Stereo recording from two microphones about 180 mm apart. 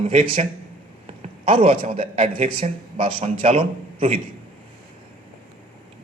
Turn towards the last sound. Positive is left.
turn(degrees=-35)  # may be behind; listen again after turning